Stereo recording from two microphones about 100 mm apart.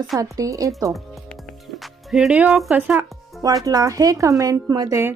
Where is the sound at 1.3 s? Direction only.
Centre (ahead or behind).